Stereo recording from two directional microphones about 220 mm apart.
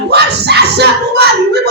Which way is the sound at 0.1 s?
50° right (ahead or behind).